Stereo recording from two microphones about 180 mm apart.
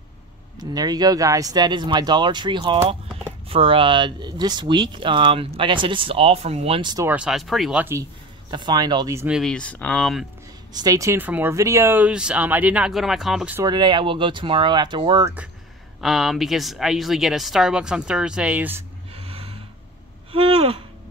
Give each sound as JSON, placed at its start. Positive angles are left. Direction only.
{"t": 0.7, "sound": "speech", "side_deg": -20}
{"t": 7.1, "sound": "speech", "side_deg": -5}
{"t": 8.5, "sound": "speech", "side_deg": -25}
{"t": 9.3, "sound": "speech", "side_deg": 0}
{"t": 10.7, "sound": "speech", "side_deg": -20}
{"t": 13.6, "sound": "speech", "side_deg": -25}
{"t": 16.0, "sound": "speech", "side_deg": 0}
{"t": 19.1, "sound": "snort", "side_deg": -30}
{"t": 20.3, "sound": "a sound", "side_deg": -30}